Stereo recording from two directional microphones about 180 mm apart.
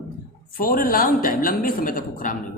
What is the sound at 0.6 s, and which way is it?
A woman's voice, 55° left (ahead or behind).